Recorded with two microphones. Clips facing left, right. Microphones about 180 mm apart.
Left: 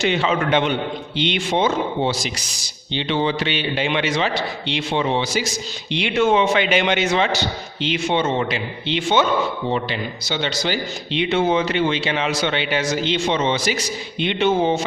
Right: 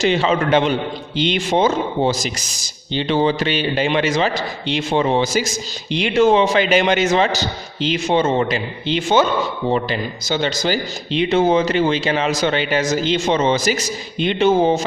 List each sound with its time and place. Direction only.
0.0 s a man's voice: 35° right (ahead or behind)